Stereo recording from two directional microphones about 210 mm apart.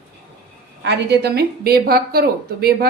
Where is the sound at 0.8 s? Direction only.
50° right (ahead or behind).